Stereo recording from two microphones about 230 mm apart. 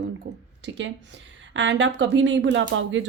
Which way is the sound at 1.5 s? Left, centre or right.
Right.